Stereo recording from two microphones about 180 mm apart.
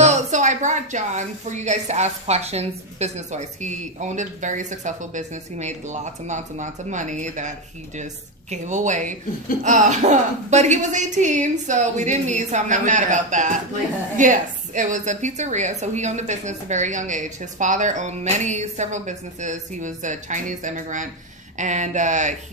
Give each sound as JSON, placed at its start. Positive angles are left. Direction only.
{"t": 0.0, "sound": "a woman's voice", "side_deg": -40}